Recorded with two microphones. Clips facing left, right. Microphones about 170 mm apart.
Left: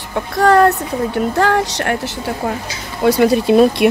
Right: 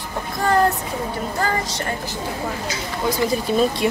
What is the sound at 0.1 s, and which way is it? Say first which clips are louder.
Speech: left 8 dB; 70° left (ahead or behind).